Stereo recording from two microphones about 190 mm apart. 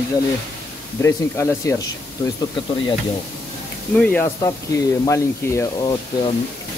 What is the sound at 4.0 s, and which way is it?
Speech, 10° left (ahead or behind).